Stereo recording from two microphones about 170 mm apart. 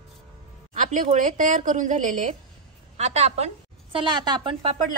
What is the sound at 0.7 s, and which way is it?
A woman's voice, 50° right (ahead or behind).